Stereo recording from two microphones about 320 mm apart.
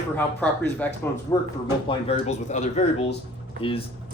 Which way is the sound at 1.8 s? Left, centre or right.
Left.